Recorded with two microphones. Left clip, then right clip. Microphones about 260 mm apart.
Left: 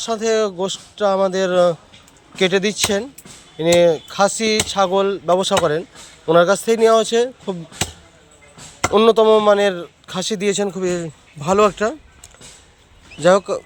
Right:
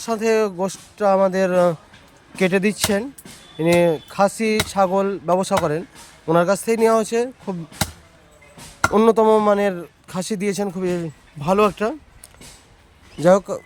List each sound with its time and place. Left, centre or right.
0.0 s speech: centre
8.9 s speech: right
13.2 s speech: right